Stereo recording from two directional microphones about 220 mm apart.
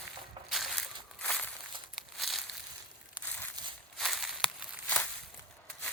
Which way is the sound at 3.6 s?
15° right (ahead or behind).